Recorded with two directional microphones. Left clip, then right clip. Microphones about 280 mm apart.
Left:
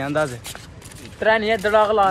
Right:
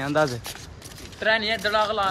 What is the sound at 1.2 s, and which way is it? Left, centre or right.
Speech, centre.